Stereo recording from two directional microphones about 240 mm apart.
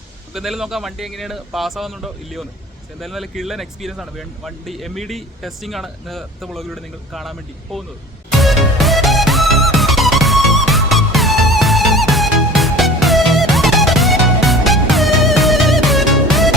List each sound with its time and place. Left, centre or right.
0.3 s speech: centre
8.3 s music: centre